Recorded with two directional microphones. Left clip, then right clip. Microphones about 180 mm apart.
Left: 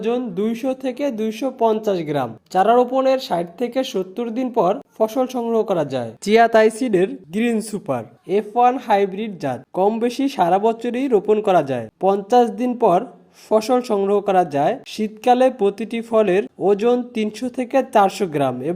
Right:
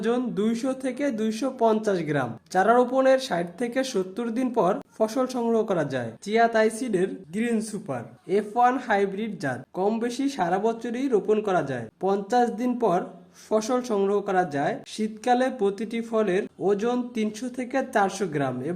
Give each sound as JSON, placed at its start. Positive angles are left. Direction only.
{"t": 0.0, "sound": "speech", "side_deg": 10}
{"t": 6.2, "sound": "speech", "side_deg": 50}
{"t": 8.3, "sound": "speech", "side_deg": 20}